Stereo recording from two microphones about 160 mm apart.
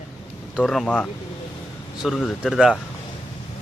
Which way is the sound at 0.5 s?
Centre (ahead or behind).